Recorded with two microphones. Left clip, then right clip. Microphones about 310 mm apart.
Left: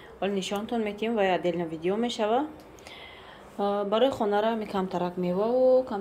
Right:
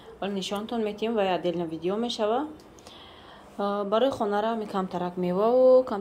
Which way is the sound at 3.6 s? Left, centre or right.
Centre.